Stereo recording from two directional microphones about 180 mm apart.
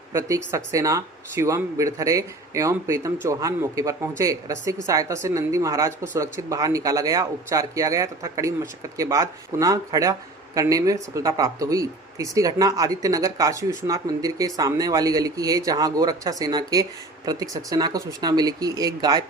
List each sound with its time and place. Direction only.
0.1 s a man's voice: 15° right (ahead or behind)